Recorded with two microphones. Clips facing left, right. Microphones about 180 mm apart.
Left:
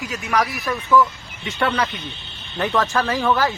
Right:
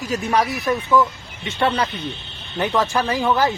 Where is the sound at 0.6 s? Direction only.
20° right (ahead or behind).